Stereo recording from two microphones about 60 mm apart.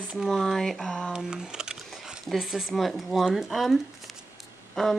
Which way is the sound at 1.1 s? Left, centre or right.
Centre.